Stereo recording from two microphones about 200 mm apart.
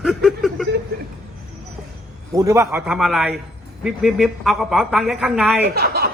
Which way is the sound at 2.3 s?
15° right (ahead or behind).